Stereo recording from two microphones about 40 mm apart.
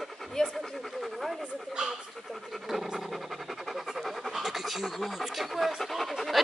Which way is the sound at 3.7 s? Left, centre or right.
Centre.